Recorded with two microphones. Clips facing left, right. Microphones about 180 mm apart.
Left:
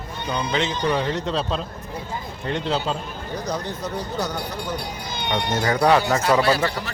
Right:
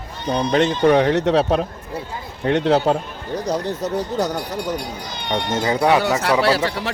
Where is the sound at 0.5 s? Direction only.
55° right (ahead or behind).